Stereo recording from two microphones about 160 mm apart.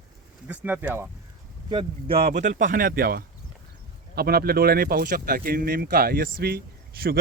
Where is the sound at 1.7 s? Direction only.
35° right (ahead or behind).